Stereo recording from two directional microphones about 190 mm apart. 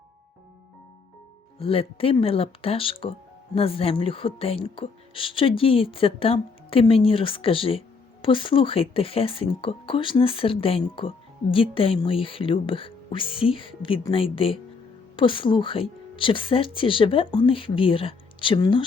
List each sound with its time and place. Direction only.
1.5 s speech: 30° left (ahead or behind)